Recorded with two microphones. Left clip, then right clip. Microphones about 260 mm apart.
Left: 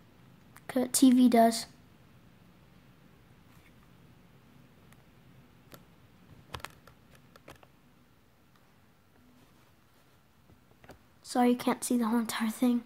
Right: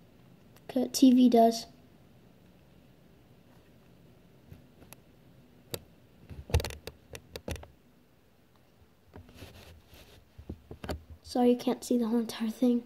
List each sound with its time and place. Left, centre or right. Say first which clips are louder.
0.7 s a woman's voice: right 1 dB; centre
11.2 s a woman's voice: right 1 dB; centre